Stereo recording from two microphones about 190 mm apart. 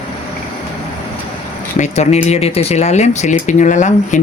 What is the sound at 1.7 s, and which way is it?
Speech, 35° left (ahead or behind).